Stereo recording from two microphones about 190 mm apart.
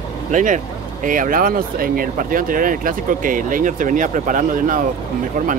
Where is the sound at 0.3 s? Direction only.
40° right (ahead or behind).